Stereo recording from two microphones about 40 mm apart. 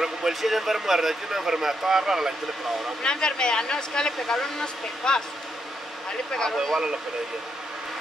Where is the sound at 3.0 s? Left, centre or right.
Left.